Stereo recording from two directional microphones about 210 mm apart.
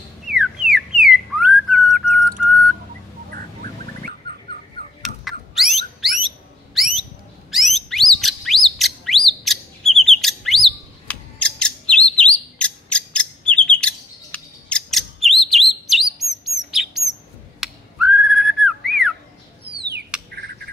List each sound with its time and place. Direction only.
0.3 s whistling: centre (ahead or behind)
5.0 s bird: centre (ahead or behind)
11.9 s chirp: 5° left (ahead or behind)
17.6 s whistling: 5° right (ahead or behind)
20.3 s a sound: 50° right (ahead or behind)